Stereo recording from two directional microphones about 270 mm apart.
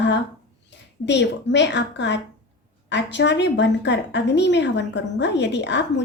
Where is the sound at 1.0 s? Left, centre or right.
Left.